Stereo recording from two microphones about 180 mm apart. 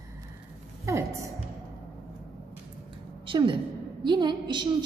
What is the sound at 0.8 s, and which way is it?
Speech, 15° right (ahead or behind).